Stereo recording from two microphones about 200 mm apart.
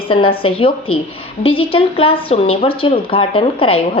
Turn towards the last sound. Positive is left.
turn(degrees=30)  # may be behind; listen again after turning